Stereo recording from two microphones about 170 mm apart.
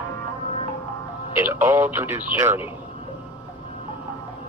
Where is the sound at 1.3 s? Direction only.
10° right (ahead or behind).